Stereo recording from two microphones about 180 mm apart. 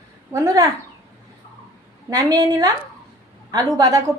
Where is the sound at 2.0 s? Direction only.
20° right (ahead or behind).